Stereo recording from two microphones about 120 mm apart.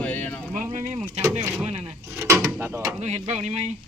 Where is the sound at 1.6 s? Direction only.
60° right (ahead or behind).